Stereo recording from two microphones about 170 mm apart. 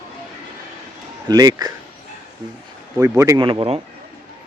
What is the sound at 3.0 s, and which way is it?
Speech, 20° right (ahead or behind).